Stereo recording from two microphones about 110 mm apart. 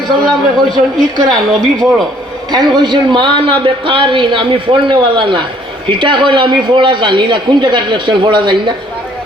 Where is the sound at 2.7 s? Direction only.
45° right (ahead or behind).